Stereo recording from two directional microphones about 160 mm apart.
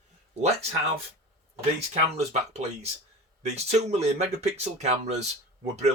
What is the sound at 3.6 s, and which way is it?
Speech, 40° right (ahead or behind).